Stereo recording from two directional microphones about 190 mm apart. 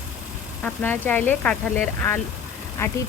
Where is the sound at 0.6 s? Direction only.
10° left (ahead or behind).